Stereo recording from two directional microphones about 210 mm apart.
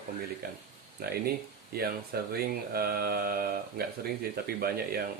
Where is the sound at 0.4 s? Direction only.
50° right (ahead or behind).